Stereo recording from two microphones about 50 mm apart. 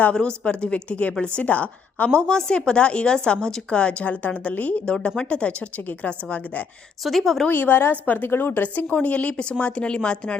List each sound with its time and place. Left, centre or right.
0.1 s speech: centre
2.0 s speech: centre; by 4.8 s left
4.9 s speech: left
7.0 s a woman's voice: centre
7.4 s a woman's voice: left